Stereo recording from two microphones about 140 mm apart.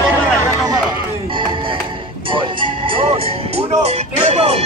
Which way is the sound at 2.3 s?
35° right (ahead or behind).